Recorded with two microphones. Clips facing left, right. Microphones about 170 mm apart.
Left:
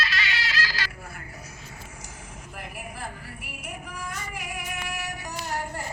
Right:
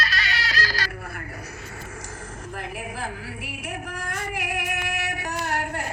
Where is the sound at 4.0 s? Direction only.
70° right (ahead or behind).